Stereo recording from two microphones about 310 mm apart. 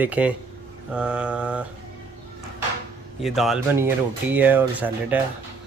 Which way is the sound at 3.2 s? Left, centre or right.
Centre.